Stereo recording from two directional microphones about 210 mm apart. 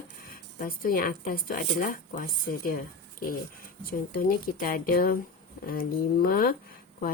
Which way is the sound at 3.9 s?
45° left (ahead or behind).